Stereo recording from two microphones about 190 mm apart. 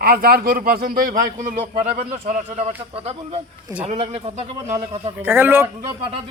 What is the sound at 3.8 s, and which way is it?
Speech, 30° right (ahead or behind).